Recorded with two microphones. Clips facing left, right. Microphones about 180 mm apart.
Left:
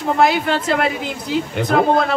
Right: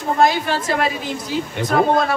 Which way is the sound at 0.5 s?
65° left (ahead or behind).